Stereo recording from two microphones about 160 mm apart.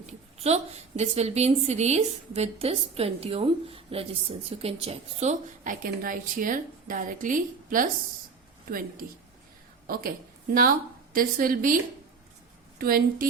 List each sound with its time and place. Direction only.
0.0 s a woman's voice: 45° right (ahead or behind)
5.6 s a woman's voice: 60° right (ahead or behind)
9.8 s a woman's voice: 65° right (ahead or behind)
11.1 s a woman's voice: 65° right (ahead or behind)
12.8 s a woman's voice: 65° right (ahead or behind)